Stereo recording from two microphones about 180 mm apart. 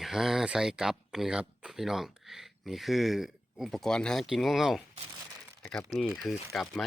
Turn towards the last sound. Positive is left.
turn(degrees=0)  # may be behind; listen again after turning